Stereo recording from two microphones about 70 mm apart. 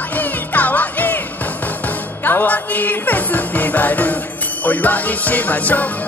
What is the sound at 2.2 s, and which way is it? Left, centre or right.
Music, left.